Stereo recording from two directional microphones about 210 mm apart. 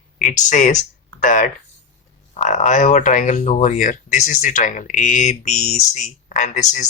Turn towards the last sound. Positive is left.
turn(degrees=35)  # may be behind; listen again after turning